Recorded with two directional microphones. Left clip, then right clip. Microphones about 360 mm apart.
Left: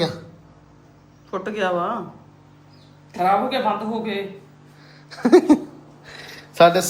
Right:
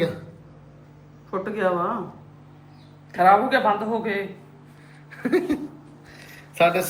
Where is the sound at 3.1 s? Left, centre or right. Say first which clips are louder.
Right 3 dB; centre.